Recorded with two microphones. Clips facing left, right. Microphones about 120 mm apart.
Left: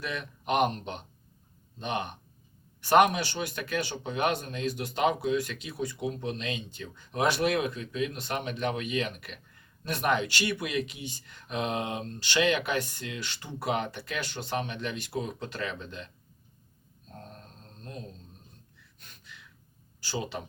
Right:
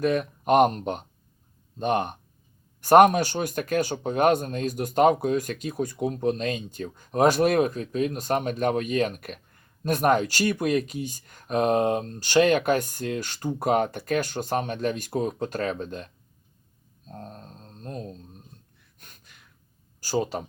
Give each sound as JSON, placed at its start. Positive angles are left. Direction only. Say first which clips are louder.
{"t": 0.0, "sound": "speech", "louder": "right 12 dB", "side_deg": -45}
{"t": 17.1, "sound": "a sound", "louder": "right 6 dB", "side_deg": -40}
{"t": 18.9, "sound": "gasp", "louder": "left 1 dB", "side_deg": -50}
{"t": 20.0, "sound": "speech", "louder": "right 8 dB", "side_deg": -45}